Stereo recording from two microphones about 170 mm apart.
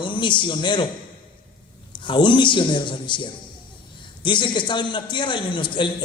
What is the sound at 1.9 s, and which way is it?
A man's voice, 30° left (ahead or behind).